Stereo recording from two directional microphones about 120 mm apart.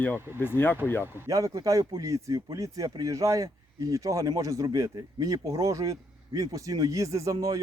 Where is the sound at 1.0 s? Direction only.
30° right (ahead or behind).